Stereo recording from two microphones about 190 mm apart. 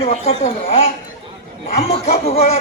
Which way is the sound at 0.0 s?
35° left (ahead or behind).